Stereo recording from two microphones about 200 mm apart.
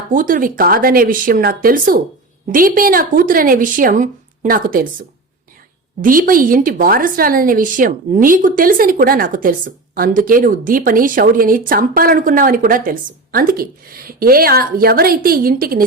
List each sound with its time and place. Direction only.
0.1 s a woman's voice: 40° right (ahead or behind)